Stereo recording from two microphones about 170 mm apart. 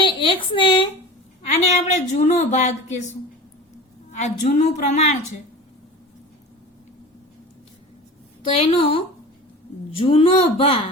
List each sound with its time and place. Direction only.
0.0 s a woman's voice: 30° left (ahead or behind)
4.1 s a woman's voice: 45° left (ahead or behind)
8.4 s a woman's voice: 30° left (ahead or behind)